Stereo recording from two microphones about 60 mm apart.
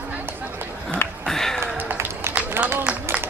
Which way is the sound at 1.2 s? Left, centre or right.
Centre.